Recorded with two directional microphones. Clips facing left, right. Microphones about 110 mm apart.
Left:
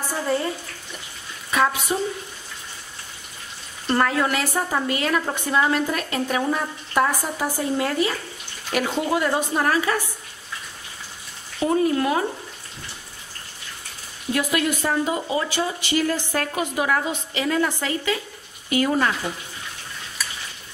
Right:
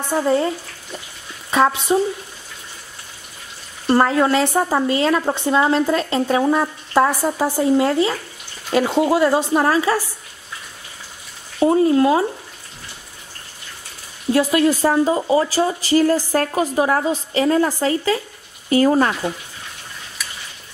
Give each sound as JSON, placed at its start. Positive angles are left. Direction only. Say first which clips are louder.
{"t": 1.5, "sound": "a woman's voice", "louder": "right 5 dB", "side_deg": -30}
{"t": 3.9, "sound": "a woman's voice", "louder": "right 6 dB", "side_deg": -25}
{"t": 11.6, "sound": "a woman's voice", "louder": "right 6 dB", "side_deg": -30}
{"t": 14.3, "sound": "speech", "louder": "right 7 dB", "side_deg": -30}